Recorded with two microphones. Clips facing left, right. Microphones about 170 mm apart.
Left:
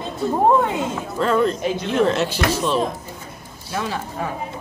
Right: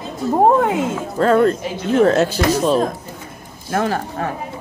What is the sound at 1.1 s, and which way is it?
Speech, 50° right (ahead or behind).